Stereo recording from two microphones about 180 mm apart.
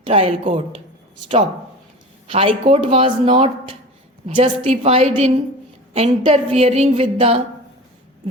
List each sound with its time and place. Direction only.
0.0 s a woman's voice: 35° right (ahead or behind)
2.2 s a woman's voice: 30° right (ahead or behind)